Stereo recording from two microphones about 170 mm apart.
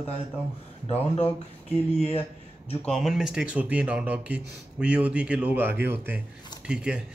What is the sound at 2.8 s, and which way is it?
Speech, 5° left (ahead or behind).